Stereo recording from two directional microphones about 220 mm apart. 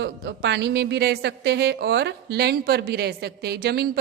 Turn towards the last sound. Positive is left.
turn(degrees=-45)  # may be behind; listen again after turning